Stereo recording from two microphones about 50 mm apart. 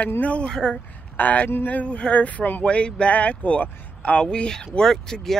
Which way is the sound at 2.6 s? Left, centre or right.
Left.